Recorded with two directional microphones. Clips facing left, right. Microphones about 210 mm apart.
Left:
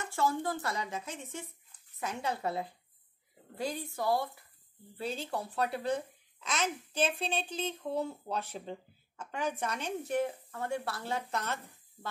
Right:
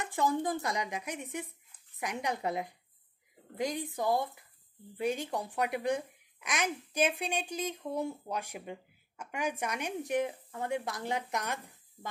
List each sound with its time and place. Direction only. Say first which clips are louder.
0.0 s speech: right 1 dB; 15° right (ahead or behind)